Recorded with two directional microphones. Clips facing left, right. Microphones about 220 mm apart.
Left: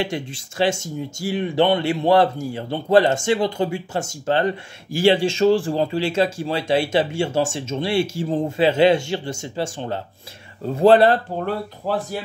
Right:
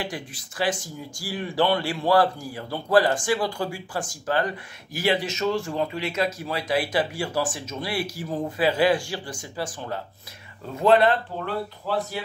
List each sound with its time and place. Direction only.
0.0 s speech: 25° left (ahead or behind); by 12.2 s 45° left (ahead or behind)